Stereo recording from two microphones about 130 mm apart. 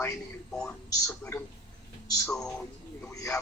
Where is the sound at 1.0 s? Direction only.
20° left (ahead or behind).